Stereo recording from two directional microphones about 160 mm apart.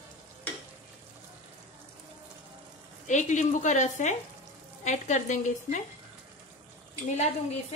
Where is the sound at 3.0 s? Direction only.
50° left (ahead or behind).